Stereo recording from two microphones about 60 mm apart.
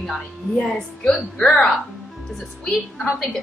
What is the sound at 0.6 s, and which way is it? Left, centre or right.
A woman's voice, centre.